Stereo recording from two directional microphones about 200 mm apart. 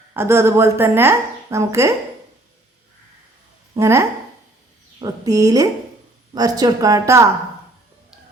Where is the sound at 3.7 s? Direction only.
15° right (ahead or behind).